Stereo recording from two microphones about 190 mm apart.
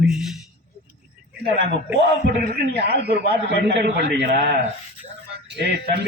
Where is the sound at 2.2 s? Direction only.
55° right (ahead or behind).